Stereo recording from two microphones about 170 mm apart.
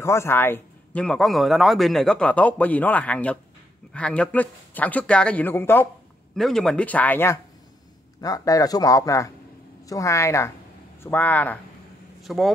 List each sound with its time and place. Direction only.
0.0 s a man's voice: 15° left (ahead or behind)
12.2 s speech: centre (ahead or behind)